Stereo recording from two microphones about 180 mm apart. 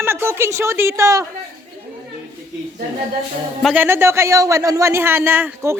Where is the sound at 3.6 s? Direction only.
10° right (ahead or behind).